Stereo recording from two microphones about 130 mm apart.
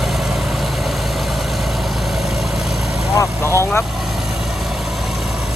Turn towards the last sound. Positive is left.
turn(degrees=20)  # may be behind; listen again after turning